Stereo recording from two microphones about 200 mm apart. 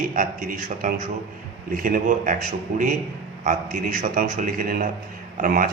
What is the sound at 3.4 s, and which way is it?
Speech, 40° right (ahead or behind).